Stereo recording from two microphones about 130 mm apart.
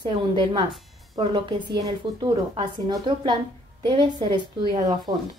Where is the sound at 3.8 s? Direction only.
35° right (ahead or behind).